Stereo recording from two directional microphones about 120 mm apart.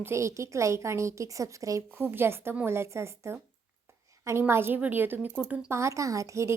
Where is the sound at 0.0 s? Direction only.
25° right (ahead or behind).